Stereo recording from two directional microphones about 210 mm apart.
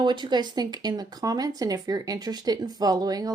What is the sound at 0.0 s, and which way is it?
Speech, 20° right (ahead or behind).